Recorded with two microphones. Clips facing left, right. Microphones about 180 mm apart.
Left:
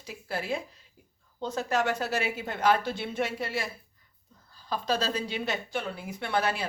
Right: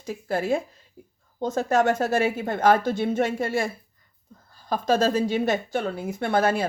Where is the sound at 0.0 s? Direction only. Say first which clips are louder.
Right 8 dB; 50° right (ahead or behind).